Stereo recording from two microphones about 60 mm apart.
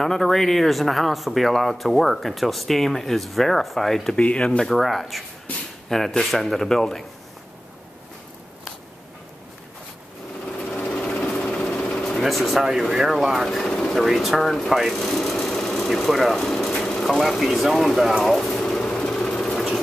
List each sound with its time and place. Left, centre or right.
0.0 s speech: centre
4.2 s speech: centre
10.4 s sewing machine: centre
11.8 s vehicle: centre
12.2 s speech: centre
13.5 s speech: centre
14.0 s speech: centre
14.7 s a sound: centre